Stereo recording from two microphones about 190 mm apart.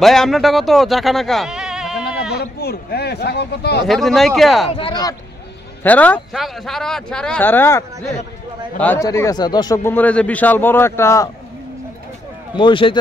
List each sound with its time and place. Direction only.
0.0 s speech: centre (ahead or behind)
2.3 s speech: 55° left (ahead or behind)
3.8 s speech: centre (ahead or behind)
4.7 s speech: 25° left (ahead or behind)
5.9 s a man's voice: 10° left (ahead or behind)
9.9 s a man's voice: 5° left (ahead or behind)
12.5 s speech: 25° left (ahead or behind)